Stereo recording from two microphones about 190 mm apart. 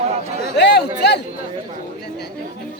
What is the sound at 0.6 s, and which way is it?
Chatter, 60° left (ahead or behind).